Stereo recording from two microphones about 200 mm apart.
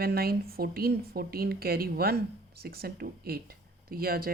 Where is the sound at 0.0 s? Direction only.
50° right (ahead or behind).